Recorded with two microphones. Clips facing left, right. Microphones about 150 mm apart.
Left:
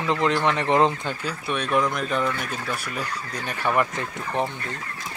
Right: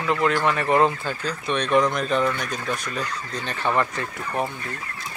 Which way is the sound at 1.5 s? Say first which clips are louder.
Right 3 dB; 5° left (ahead or behind).